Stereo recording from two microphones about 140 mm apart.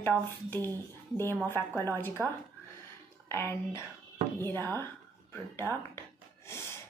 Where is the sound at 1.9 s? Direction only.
15° left (ahead or behind).